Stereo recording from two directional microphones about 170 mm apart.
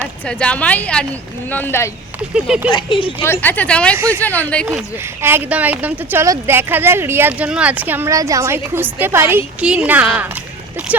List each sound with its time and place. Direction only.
0.3 s a woman's voice: 5° left (ahead or behind)
2.3 s a woman's voice: 5° right (ahead or behind)
2.7 s speech: 30° left (ahead or behind)
3.4 s a woman's voice: 10° left (ahead or behind)
5.2 s a woman's voice: 10° right (ahead or behind)